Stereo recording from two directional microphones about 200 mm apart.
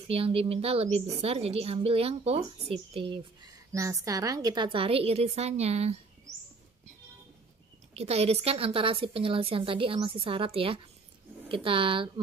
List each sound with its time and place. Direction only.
0.1 s a woman's voice: 30° right (ahead or behind)
3.7 s a woman's voice: 15° right (ahead or behind); by 5.9 s 30° right (ahead or behind)
7.9 s a woman's voice: 30° right (ahead or behind)